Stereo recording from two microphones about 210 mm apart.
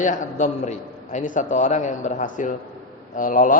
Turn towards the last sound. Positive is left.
turn(degrees=40)  # may be behind; listen again after turning